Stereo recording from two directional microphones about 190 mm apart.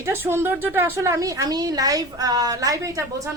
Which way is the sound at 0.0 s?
10° right (ahead or behind).